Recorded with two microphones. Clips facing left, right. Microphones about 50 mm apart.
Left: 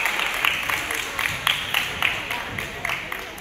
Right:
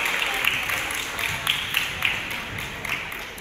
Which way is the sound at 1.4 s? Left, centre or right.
Left.